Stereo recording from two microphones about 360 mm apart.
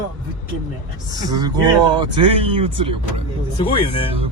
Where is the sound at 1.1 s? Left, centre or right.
Centre.